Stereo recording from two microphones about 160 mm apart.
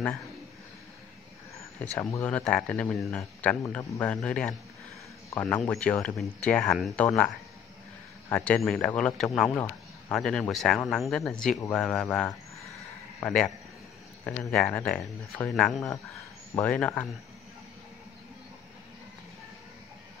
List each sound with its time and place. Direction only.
1.8 s speech: 10° left (ahead or behind)
8.3 s speech: 10° left (ahead or behind)